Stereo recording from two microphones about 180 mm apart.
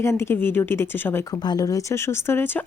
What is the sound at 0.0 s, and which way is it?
Speech, 15° left (ahead or behind).